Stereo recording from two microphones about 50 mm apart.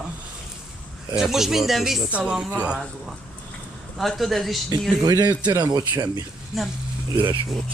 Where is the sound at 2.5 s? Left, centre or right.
Right.